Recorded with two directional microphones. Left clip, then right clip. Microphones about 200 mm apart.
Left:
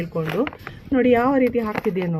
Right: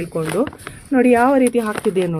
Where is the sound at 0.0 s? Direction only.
45° right (ahead or behind).